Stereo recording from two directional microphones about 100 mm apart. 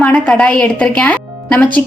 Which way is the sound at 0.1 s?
10° left (ahead or behind).